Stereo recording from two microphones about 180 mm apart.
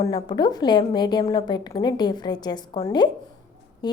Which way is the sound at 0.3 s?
25° left (ahead or behind).